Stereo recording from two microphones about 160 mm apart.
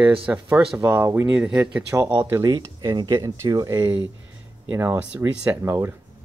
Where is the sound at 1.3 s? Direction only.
5° right (ahead or behind).